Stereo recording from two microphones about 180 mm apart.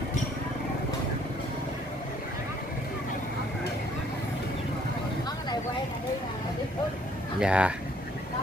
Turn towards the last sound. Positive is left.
turn(degrees=-5)  # may be behind; listen again after turning